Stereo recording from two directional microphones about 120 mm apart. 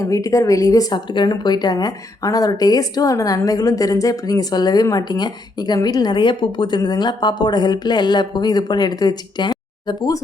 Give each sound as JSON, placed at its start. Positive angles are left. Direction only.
{"t": 0.0, "sound": "a woman's voice", "side_deg": 25}